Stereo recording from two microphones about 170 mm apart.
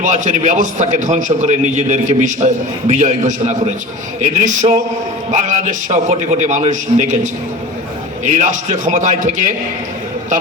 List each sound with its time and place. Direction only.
0.0 s a man's voice: 45° right (ahead or behind)